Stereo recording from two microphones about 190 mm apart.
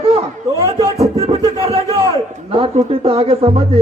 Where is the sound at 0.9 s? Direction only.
35° right (ahead or behind).